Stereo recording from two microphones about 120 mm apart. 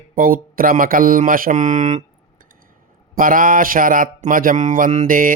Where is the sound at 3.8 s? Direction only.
90° right.